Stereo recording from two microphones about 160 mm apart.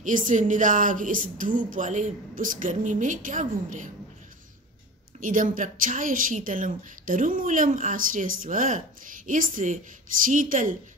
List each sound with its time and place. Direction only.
0.0 s a woman's voice: 55° right (ahead or behind)
5.2 s speech: 55° right (ahead or behind)